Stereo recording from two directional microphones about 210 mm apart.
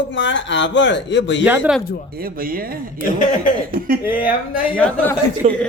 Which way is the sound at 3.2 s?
35° left (ahead or behind).